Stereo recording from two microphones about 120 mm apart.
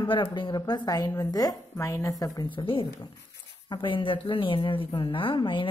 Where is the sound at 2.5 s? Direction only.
50° left (ahead or behind).